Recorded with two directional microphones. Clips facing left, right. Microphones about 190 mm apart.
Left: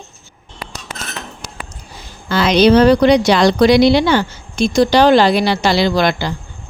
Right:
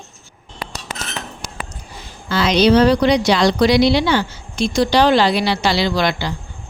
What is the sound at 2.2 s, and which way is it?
Speech, 55° left (ahead or behind).